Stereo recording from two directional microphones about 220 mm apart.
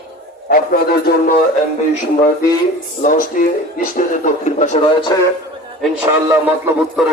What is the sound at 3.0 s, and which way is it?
Speech, 40° left (ahead or behind).